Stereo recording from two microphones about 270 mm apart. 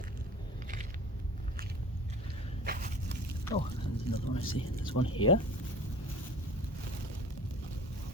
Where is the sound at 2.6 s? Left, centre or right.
Right.